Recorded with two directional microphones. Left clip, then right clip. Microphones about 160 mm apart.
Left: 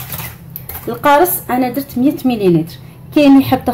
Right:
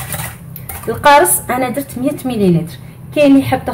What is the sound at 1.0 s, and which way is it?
A woman's voice, 20° left (ahead or behind).